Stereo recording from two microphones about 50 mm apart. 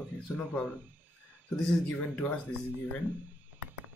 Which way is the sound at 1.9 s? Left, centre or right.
Left.